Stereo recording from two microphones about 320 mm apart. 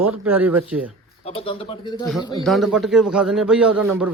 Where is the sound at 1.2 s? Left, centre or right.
Centre.